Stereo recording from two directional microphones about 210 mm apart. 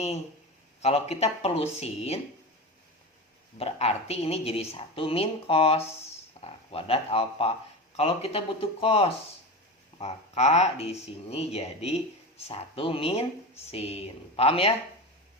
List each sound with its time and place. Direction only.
0.8 s a woman's voice: 30° left (ahead or behind)
3.6 s a woman's voice: 30° left (ahead or behind)